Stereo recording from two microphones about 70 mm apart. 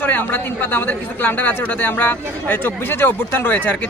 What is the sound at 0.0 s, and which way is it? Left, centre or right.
Speech, left.